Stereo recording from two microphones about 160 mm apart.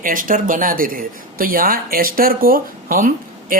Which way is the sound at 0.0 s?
55° right (ahead or behind).